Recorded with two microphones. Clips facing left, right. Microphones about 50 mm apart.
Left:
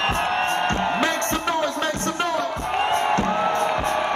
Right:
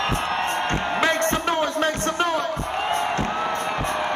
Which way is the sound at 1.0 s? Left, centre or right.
Right.